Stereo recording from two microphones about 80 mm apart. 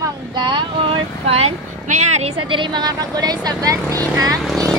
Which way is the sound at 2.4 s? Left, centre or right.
Right.